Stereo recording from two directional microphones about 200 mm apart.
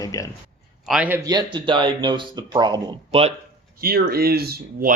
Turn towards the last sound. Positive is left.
turn(degrees=-50)  # may be behind; listen again after turning